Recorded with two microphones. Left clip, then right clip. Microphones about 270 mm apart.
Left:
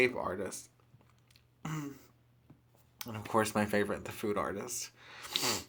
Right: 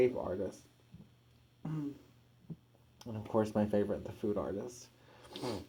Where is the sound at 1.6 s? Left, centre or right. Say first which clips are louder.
Even; left.